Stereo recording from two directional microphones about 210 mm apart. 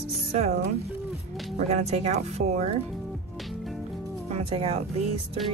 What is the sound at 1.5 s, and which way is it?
Speech, 30° right (ahead or behind).